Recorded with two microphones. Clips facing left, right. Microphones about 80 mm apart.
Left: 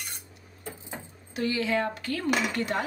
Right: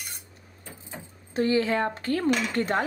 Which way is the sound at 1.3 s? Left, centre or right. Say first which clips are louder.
Right 4 dB; right.